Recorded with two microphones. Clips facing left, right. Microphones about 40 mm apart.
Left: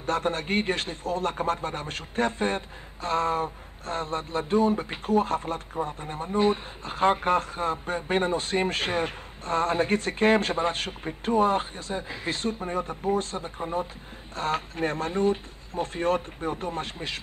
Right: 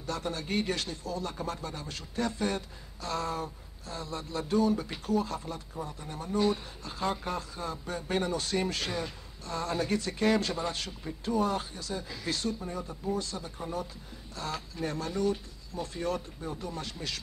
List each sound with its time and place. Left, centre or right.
0.0 s a man's voice: left